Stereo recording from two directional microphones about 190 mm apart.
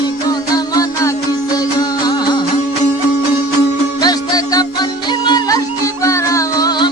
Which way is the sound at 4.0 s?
20° left (ahead or behind).